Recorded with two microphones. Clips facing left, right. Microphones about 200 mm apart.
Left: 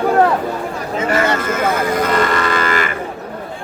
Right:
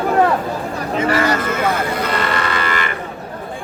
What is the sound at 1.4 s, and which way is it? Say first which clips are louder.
Speech: left 1 dB; 45° left (ahead or behind).